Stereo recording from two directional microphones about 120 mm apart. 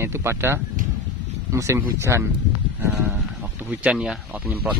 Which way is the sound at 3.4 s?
15° right (ahead or behind).